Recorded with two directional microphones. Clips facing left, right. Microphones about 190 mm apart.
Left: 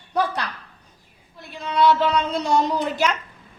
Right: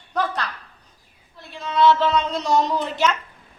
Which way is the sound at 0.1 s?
15° left (ahead or behind).